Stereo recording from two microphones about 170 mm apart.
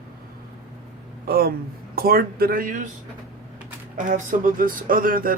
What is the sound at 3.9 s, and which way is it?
Speech, 50° right (ahead or behind).